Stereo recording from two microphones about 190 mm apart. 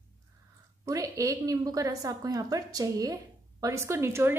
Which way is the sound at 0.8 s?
15° right (ahead or behind).